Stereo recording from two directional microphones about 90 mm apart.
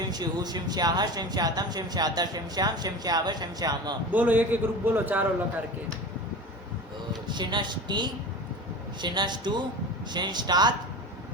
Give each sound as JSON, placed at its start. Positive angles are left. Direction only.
{"t": 0.0, "sound": "speech", "side_deg": -50}
{"t": 4.1, "sound": "a man's voice", "side_deg": -20}
{"t": 7.3, "sound": "a man's voice", "side_deg": -55}